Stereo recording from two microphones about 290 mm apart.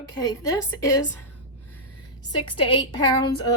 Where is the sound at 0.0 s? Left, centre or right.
Centre.